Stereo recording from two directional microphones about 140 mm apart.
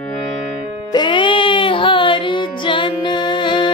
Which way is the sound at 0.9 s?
35° left (ahead or behind).